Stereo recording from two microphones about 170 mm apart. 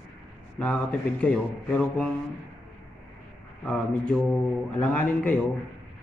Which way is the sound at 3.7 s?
5° left (ahead or behind).